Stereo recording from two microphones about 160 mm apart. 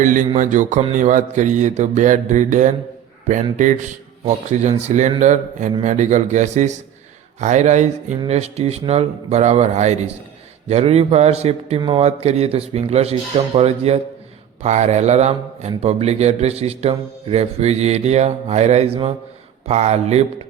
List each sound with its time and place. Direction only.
0.0 s mantra: 55° right (ahead or behind)
0.3 s speech: 50° right (ahead or behind)